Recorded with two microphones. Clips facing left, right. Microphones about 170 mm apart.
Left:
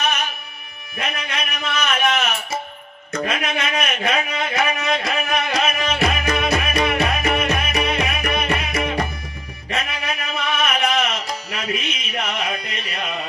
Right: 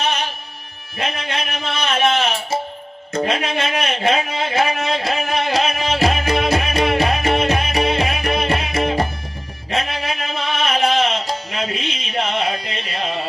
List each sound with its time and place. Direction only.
0.0 s music: 30° right (ahead or behind)
0.9 s a man's voice: 30° right (ahead or behind)
3.1 s a sound: 30° right (ahead or behind)
9.7 s music: 30° right (ahead or behind)